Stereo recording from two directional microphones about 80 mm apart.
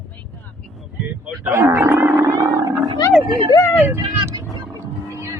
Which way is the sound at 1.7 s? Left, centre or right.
Right.